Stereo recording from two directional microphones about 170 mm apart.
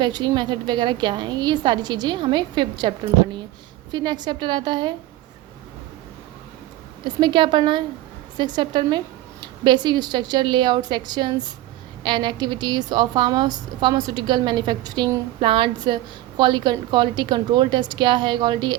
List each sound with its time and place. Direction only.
0.0 s a woman's voice: 25° right (ahead or behind)
7.0 s a woman's voice: 25° right (ahead or behind)